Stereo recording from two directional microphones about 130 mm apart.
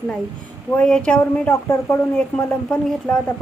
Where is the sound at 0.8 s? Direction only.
10° left (ahead or behind).